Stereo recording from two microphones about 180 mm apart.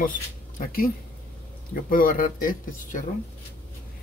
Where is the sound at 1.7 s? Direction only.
50° left (ahead or behind).